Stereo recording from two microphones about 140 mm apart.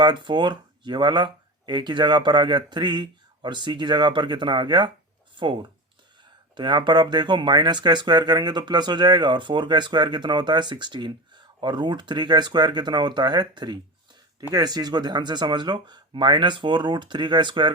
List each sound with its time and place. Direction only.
0.0 s speech: 35° right (ahead or behind)
5.3 s a sound: 35° right (ahead or behind)
6.6 s speech: 30° right (ahead or behind)